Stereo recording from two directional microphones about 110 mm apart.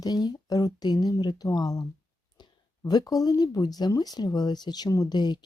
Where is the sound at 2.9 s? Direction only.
35° left (ahead or behind).